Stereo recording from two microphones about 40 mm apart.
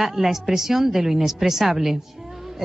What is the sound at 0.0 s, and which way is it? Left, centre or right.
Speech, centre.